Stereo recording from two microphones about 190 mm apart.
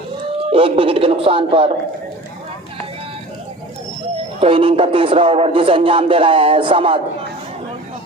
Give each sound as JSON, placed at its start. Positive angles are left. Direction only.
{"t": 0.5, "sound": "a man's voice", "side_deg": -30}
{"t": 4.4, "sound": "a man's voice", "side_deg": -30}